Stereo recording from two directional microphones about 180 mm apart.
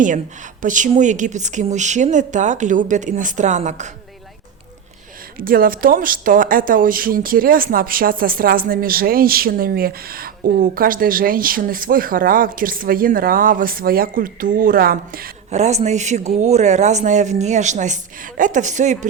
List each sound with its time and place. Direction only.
0.6 s speech: 45° right (ahead or behind)
5.4 s speech: 55° right (ahead or behind)
15.4 s a man's voice: 40° right (ahead or behind)